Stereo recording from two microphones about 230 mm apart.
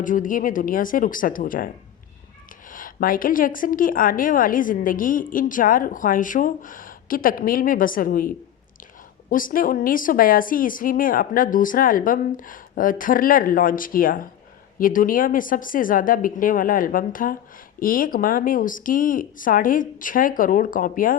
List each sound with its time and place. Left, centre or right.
0.0 s a woman's voice: left
9.3 s a woman's voice: left